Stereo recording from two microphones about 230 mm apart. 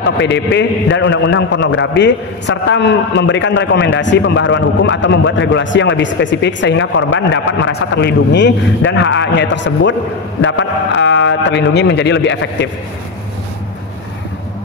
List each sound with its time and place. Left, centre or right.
0.2 s a man's voice: left